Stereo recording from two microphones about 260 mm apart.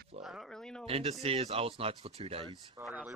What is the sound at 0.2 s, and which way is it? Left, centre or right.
Speech, centre.